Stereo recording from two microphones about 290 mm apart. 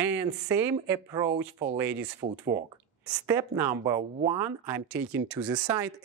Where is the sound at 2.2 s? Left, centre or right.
Right.